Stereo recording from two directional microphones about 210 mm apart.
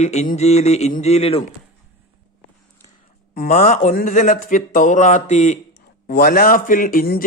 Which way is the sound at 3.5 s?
35° left (ahead or behind).